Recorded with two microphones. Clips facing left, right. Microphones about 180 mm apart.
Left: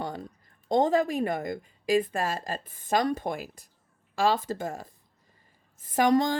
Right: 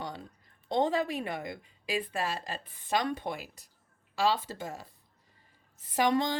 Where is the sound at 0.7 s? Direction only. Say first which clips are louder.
Left 5 dB; 45° left (ahead or behind).